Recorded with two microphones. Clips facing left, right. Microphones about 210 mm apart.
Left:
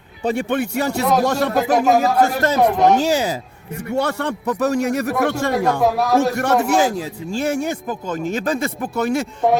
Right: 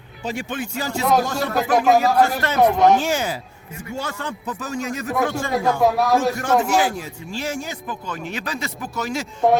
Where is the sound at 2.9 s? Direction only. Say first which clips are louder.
Left 3 dB; 35° left (ahead or behind).